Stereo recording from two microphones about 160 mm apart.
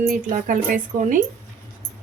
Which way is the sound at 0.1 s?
55° right (ahead or behind).